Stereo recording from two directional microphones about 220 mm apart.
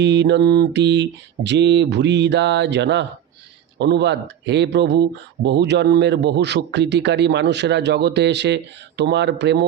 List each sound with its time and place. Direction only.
0.0 s a man's voice: 50° right (ahead or behind)